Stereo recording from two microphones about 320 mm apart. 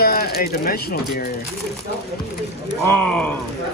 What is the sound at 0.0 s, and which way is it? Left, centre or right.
Speech, left.